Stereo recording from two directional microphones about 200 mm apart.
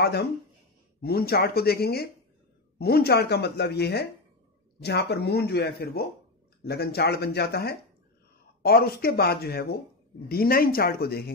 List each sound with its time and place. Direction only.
0.0 s a woman's voice: 55° left (ahead or behind)